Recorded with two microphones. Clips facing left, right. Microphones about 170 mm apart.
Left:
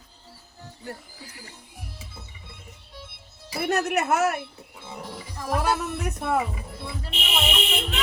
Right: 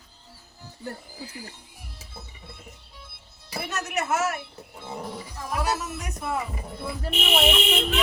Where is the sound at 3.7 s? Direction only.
60° left (ahead or behind).